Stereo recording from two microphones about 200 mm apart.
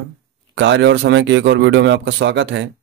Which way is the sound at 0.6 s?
65° right (ahead or behind).